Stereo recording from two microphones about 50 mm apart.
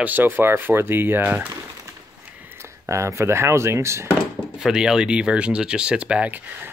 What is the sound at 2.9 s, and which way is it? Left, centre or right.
Speech, right.